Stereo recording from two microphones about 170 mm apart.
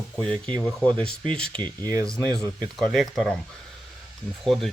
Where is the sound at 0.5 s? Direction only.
5° left (ahead or behind).